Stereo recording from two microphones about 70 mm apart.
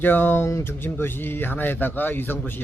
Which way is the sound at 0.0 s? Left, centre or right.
Left.